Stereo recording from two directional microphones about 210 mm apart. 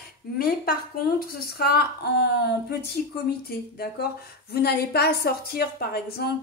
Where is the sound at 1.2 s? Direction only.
45° left (ahead or behind).